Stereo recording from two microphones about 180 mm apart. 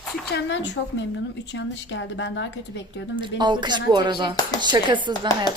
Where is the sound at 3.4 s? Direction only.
25° right (ahead or behind).